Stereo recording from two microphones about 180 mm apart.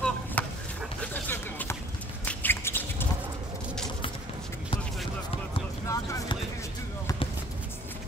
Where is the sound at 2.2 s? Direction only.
10° left (ahead or behind).